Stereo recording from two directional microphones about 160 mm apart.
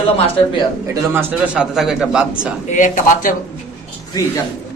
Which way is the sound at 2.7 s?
55° left (ahead or behind).